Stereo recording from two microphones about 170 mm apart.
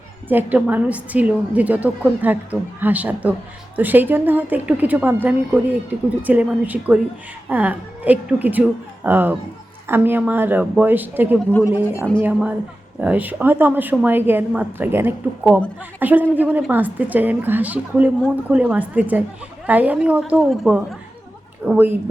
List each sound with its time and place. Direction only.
0.3 s a woman's voice: 10° right (ahead or behind)